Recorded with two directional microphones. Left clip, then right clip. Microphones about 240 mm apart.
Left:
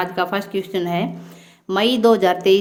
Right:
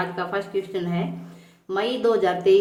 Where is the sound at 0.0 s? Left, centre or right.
Left.